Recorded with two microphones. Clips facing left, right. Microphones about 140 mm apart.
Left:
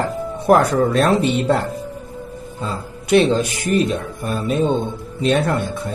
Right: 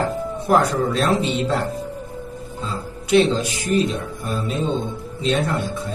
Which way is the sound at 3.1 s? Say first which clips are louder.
Left 2 dB; 60° left (ahead or behind).